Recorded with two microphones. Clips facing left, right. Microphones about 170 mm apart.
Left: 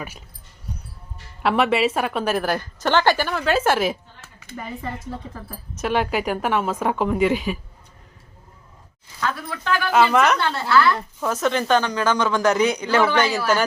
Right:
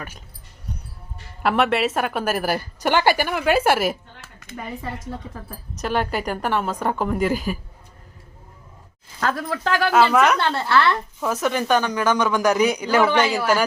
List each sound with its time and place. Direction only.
1.4 s a woman's voice: centre (ahead or behind)
4.4 s speech: 5° left (ahead or behind)
9.2 s speech: 40° right (ahead or behind)
9.9 s speech: centre (ahead or behind)
10.4 s a woman's voice: 25° right (ahead or behind)
11.2 s a woman's voice: 5° right (ahead or behind)